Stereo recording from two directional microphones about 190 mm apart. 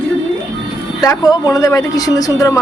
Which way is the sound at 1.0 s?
20° left (ahead or behind).